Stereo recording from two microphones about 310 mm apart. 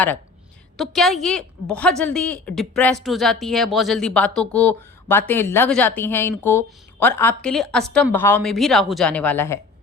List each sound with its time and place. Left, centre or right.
0.8 s a woman's voice: centre